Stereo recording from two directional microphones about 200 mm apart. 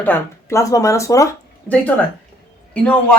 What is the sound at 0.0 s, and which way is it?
Speech, 10° left (ahead or behind).